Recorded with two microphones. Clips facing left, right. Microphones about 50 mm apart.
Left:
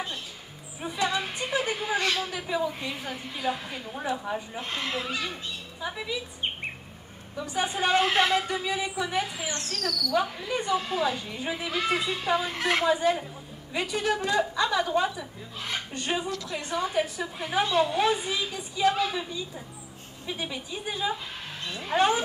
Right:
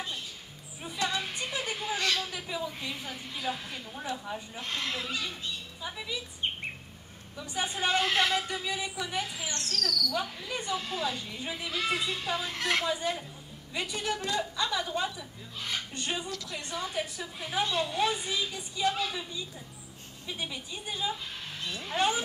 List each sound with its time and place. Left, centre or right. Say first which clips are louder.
0.7 s a sound: left 4 dB; centre
4.6 s speech: left 3 dB; centre
16.3 s a woman's voice: left 5 dB; left
16.5 s speech: left 7 dB; centre